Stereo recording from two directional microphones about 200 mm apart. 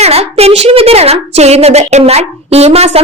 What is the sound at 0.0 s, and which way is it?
A woman's voice, 30° right (ahead or behind).